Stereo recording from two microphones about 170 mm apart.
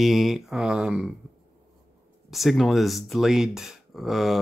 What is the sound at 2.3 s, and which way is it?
Speech, centre (ahead or behind).